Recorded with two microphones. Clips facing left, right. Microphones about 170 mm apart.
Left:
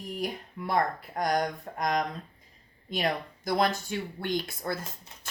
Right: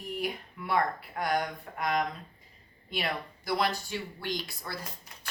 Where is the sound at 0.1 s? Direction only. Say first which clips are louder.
Even; 40° left (ahead or behind).